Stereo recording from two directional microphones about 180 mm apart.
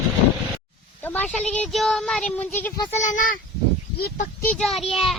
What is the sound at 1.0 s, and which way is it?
A child's voice, 10° left (ahead or behind).